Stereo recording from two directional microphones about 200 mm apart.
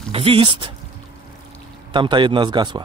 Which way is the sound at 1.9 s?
25° right (ahead or behind).